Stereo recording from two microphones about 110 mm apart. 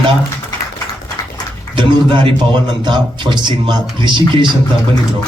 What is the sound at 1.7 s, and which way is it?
A man's voice, 45° right (ahead or behind).